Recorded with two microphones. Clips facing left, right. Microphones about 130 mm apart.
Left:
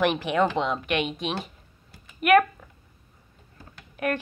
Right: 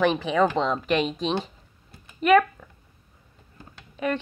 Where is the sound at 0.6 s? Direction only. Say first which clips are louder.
Right 2 dB; 20° right (ahead or behind).